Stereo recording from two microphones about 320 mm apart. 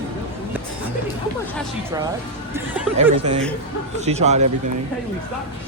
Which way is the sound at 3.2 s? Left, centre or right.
Centre.